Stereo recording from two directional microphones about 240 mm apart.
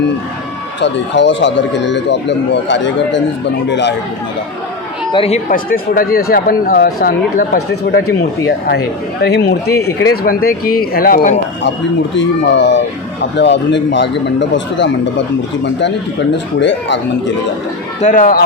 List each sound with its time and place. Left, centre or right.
0.8 s speech: left
5.1 s speech: left
12.1 s speech: left
16.6 s speech: left
18.0 s speech: left